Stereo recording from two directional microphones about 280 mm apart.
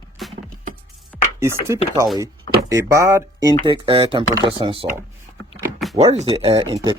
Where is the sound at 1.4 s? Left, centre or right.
Centre.